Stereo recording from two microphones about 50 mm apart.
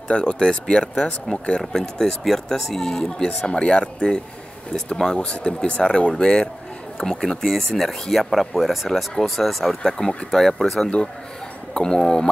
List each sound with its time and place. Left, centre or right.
0.1 s speech: centre
3.4 s speech: left